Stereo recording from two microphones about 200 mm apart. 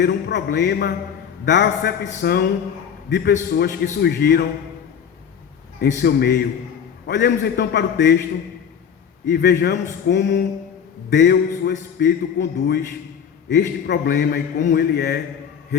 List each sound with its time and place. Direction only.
0.0 s a man's voice: 60° left (ahead or behind)
5.8 s a man's voice: 55° left (ahead or behind)
9.3 s a man's voice: 55° left (ahead or behind)